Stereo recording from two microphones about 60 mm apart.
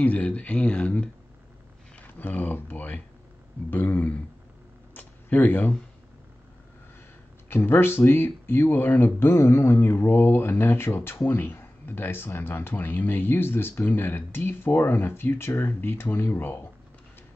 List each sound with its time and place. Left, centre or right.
0.0 s speech: left
2.1 s speech: left
4.9 s a sound: left
7.4 s speech: left